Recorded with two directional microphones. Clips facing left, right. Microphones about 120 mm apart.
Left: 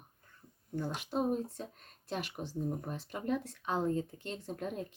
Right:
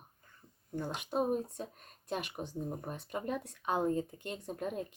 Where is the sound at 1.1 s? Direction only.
5° right (ahead or behind).